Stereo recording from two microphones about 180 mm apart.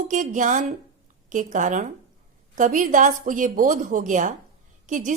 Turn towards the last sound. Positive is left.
turn(degrees=-45)  # may be behind; listen again after turning